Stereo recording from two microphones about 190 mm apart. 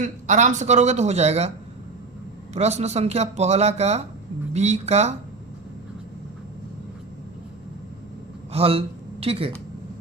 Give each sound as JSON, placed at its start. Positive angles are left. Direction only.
{"t": 0.0, "sound": "speech", "side_deg": -40}
{"t": 8.5, "sound": "speech", "side_deg": -30}